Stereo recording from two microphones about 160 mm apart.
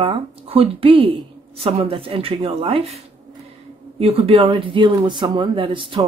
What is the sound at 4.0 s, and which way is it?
Speech, 35° right (ahead or behind).